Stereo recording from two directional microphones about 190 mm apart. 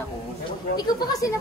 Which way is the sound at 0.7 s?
20° left (ahead or behind).